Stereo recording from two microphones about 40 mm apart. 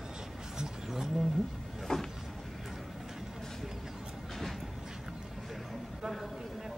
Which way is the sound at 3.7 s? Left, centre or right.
Centre.